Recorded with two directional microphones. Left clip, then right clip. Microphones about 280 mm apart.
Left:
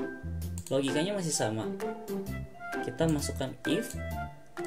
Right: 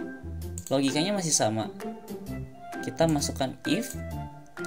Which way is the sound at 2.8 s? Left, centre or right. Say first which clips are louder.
Right 5 dB; right.